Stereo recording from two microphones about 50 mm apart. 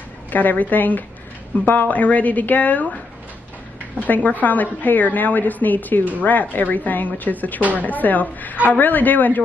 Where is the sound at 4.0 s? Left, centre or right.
Left.